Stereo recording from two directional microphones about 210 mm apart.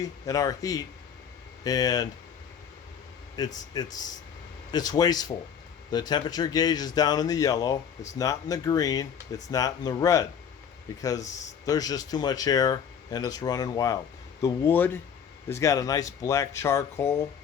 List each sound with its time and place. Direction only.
0.0 s speech: 15° left (ahead or behind)
3.4 s speech: 20° left (ahead or behind)